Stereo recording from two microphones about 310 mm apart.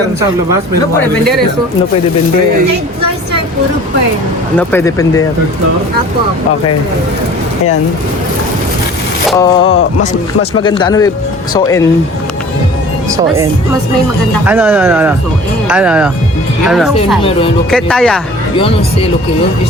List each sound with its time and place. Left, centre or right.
4.5 s speech: centre
9.4 s speech: centre
13.1 s a woman's voice: centre
18.5 s speech: centre